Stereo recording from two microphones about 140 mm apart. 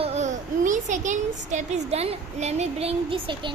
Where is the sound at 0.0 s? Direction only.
55° right (ahead or behind).